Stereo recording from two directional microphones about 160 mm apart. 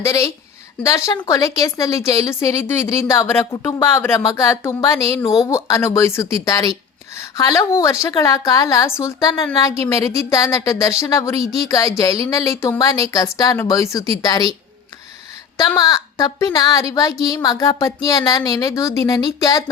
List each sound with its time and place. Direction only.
0.0 s speech: 20° left (ahead or behind)
15.5 s speech: 25° left (ahead or behind)